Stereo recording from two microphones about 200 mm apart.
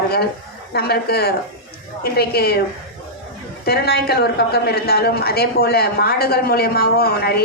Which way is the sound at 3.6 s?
50° left (ahead or behind).